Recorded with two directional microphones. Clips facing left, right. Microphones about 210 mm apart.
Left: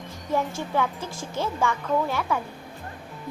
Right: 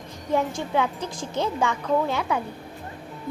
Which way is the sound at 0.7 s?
20° right (ahead or behind).